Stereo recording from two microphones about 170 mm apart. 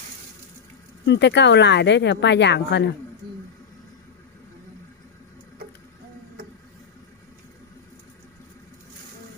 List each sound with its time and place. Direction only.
1.0 s speech: 90° left